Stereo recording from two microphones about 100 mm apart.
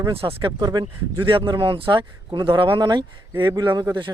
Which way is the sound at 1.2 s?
60° right (ahead or behind).